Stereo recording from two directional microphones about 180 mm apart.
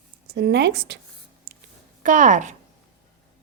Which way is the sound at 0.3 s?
65° right (ahead or behind).